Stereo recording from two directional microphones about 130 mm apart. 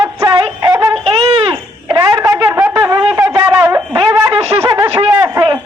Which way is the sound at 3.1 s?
20° right (ahead or behind).